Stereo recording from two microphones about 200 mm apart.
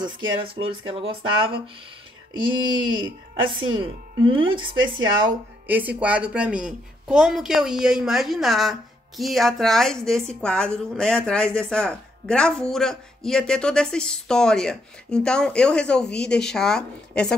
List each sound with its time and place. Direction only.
0.0 s speech: 25° right (ahead or behind)
5.7 s speech: 10° right (ahead or behind)